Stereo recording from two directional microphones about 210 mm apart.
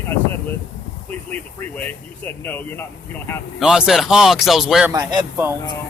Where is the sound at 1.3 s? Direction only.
5° left (ahead or behind).